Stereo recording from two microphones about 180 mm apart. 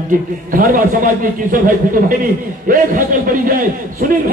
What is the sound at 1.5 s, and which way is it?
A man's voice, 50° right (ahead or behind).